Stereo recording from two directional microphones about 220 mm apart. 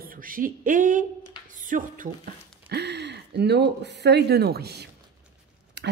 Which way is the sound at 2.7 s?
50° right (ahead or behind).